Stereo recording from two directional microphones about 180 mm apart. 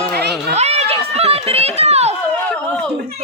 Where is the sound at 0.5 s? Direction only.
35° right (ahead or behind).